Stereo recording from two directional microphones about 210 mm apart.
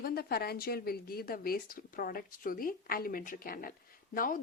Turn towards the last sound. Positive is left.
turn(degrees=40)  # may be behind; listen again after turning